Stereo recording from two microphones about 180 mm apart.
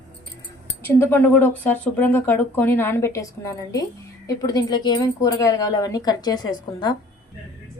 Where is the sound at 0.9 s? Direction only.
10° left (ahead or behind).